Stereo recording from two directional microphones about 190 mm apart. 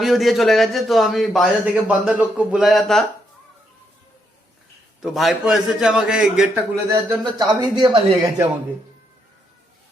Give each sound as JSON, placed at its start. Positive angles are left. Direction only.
{"t": 0.0, "sound": "a man's voice", "side_deg": 0}
{"t": 5.0, "sound": "a man's voice", "side_deg": 0}
{"t": 6.9, "sound": "speech", "side_deg": -20}